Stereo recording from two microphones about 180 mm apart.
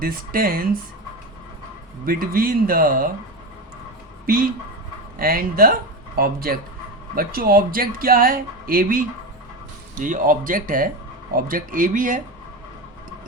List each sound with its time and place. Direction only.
0.0 s speech: 55° right (ahead or behind)
2.0 s speech: 55° right (ahead or behind)
5.2 s speech: 55° right (ahead or behind)